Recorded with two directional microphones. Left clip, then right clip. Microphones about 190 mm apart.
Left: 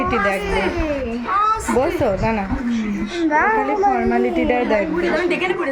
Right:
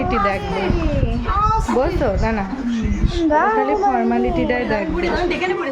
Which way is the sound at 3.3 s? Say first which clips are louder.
Even; 35° right (ahead or behind).